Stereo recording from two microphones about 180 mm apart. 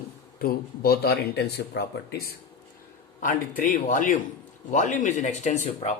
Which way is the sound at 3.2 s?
50° left (ahead or behind).